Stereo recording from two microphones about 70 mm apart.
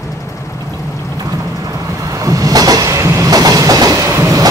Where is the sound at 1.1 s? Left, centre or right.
Right.